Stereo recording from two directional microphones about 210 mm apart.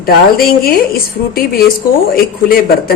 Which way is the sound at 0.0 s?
45° left (ahead or behind).